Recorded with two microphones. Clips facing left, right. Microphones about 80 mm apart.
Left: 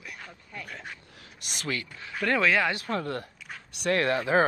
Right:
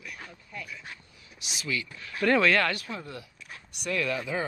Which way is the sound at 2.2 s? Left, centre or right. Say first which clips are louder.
Right 1 dB; centre.